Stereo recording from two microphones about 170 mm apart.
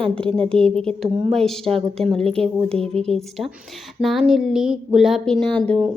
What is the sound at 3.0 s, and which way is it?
Speech, centre (ahead or behind).